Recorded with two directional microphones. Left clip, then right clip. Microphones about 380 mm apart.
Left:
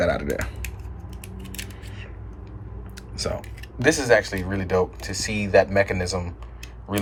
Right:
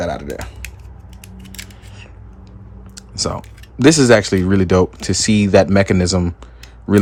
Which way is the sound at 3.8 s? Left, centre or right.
Centre.